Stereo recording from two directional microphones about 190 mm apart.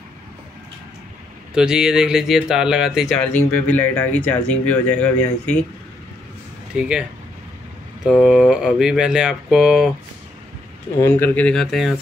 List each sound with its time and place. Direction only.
1.5 s speech: 5° right (ahead or behind)
6.7 s speech: 5° right (ahead or behind)
11.0 s speech: 10° left (ahead or behind)